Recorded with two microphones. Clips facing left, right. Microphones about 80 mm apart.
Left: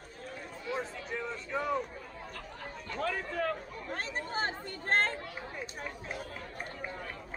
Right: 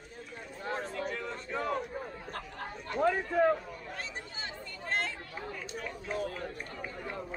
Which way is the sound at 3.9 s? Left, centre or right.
Left.